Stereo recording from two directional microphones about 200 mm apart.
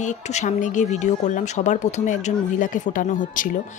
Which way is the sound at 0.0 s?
35° left (ahead or behind).